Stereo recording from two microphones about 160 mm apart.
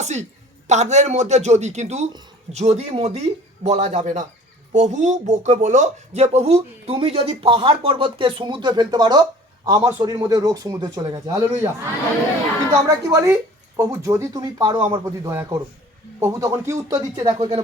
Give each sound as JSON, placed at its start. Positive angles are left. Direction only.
{"t": 0.0, "sound": "a sound", "side_deg": -45}
{"t": 0.7, "sound": "speech", "side_deg": -45}
{"t": 13.1, "sound": "speech", "side_deg": -20}
{"t": 17.2, "sound": "speech", "side_deg": -40}